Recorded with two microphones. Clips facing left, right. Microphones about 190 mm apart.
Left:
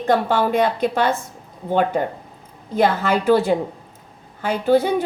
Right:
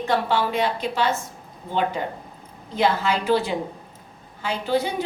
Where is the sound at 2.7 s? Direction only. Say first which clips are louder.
Left 4 dB; 50° left (ahead or behind).